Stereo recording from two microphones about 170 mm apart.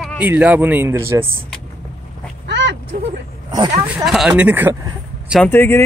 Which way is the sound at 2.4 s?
90° right.